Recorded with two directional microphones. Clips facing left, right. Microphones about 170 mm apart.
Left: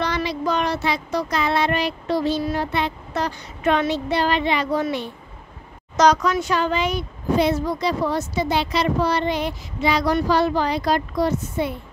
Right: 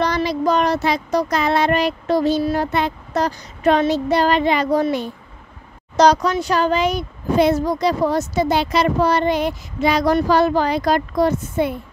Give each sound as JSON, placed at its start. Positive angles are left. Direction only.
{"t": 0.0, "sound": "a child's voice", "side_deg": -40}